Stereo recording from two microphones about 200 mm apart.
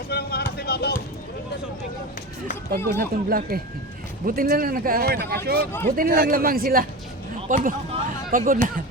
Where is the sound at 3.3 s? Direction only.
45° right (ahead or behind).